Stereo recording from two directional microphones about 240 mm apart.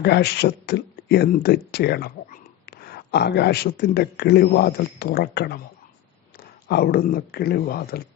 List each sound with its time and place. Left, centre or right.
0.0 s speech: left
6.7 s speech: left